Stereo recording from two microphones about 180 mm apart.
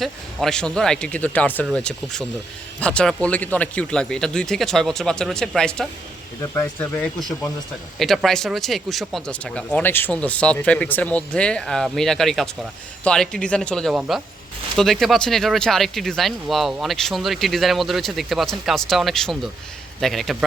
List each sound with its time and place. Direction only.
0.0 s speech: centre (ahead or behind)